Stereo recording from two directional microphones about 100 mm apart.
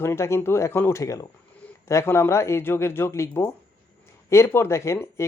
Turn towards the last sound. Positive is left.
turn(degrees=25)  # may be behind; listen again after turning